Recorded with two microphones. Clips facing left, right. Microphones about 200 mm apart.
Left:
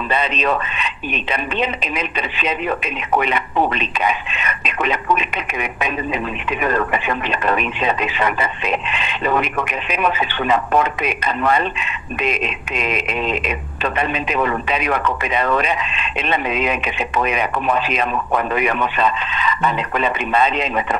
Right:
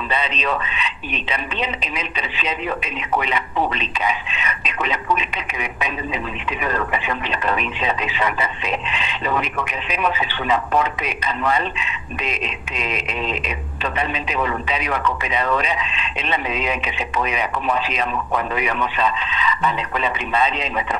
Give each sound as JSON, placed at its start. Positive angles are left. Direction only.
{"t": 0.1, "sound": "speech", "side_deg": 50}